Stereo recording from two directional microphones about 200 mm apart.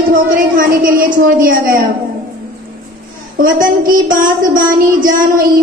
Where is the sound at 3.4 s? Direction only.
45° right (ahead or behind).